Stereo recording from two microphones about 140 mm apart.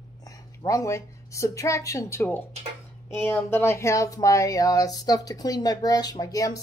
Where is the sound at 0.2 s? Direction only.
25° left (ahead or behind).